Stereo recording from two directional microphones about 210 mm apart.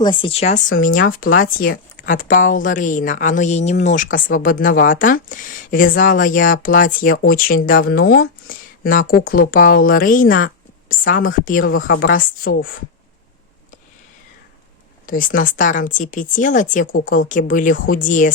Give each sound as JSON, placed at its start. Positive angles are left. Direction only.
{"t": 0.0, "sound": "speech", "side_deg": 25}
{"t": 15.0, "sound": "speech", "side_deg": 40}